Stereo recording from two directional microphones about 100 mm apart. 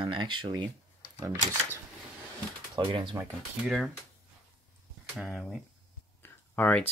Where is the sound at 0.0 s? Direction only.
55° right (ahead or behind).